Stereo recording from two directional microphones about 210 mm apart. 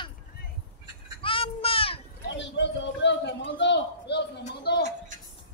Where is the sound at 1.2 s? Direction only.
25° left (ahead or behind).